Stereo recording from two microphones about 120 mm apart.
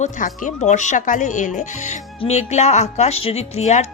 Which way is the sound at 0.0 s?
85° left.